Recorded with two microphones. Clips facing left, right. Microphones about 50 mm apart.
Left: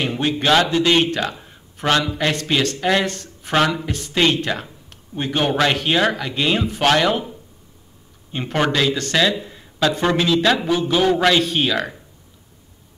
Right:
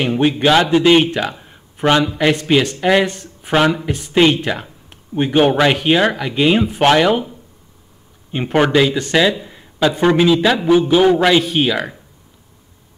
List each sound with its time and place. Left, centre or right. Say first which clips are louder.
0.0 s a man's voice: right 5 dB; centre
8.3 s a man's voice: right 5 dB; centre